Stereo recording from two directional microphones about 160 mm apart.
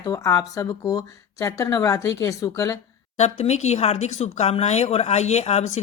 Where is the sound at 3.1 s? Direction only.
45° left (ahead or behind).